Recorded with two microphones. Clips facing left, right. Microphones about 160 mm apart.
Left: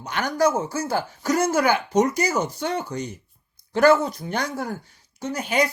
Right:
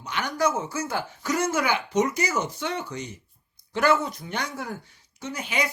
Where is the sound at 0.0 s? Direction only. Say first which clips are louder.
Left 4 dB; 45° left (ahead or behind).